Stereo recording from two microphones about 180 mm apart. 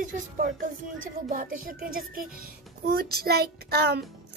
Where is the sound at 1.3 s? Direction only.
50° right (ahead or behind).